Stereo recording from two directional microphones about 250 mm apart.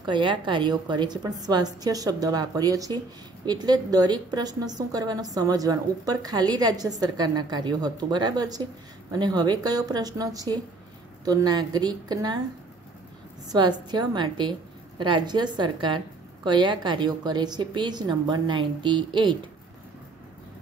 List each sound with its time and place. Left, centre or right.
0.0 s a woman's voice: centre
13.5 s a woman's voice: centre